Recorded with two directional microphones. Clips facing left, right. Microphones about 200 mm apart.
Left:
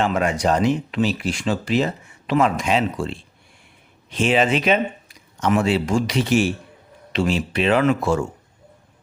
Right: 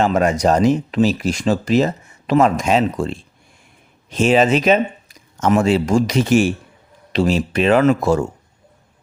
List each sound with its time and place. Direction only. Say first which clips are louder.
0.0 s speech: right 4 dB; 40° right (ahead or behind)